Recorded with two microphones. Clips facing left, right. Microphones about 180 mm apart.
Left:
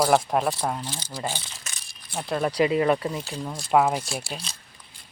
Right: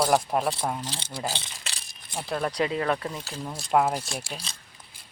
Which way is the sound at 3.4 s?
Centre (ahead or behind).